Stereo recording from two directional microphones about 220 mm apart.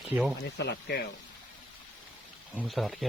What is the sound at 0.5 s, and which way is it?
Speech, 50° left (ahead or behind).